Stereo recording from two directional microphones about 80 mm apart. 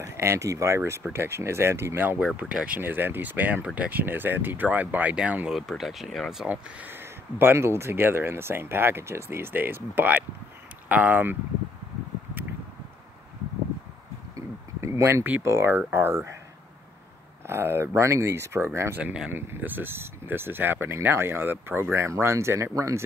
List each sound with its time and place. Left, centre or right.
0.0 s speech: right; by 5.5 s centre
5.5 s speech: centre
6.4 s speech: centre
14.3 s a sound: right
15.4 s speech: right
17.5 s speech: right